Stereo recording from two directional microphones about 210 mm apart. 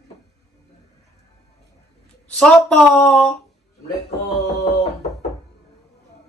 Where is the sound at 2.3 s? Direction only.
5° left (ahead or behind).